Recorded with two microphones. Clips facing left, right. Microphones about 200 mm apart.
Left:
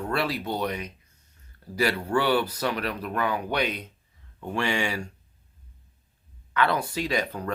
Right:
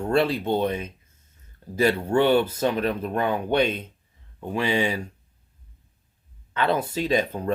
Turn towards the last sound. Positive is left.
turn(degrees=-25)  # may be behind; listen again after turning